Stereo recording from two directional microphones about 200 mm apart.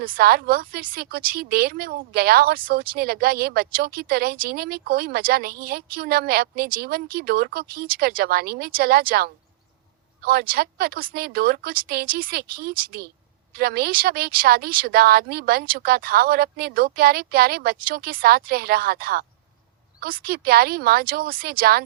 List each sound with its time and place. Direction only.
0.0 s speech: 50° right (ahead or behind)